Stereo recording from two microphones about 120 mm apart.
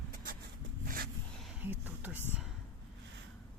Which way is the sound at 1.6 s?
15° right (ahead or behind).